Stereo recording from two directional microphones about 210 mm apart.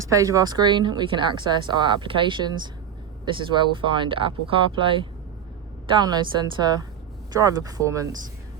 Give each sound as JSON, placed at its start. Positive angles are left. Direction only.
{"t": 0.0, "sound": "speech", "side_deg": -15}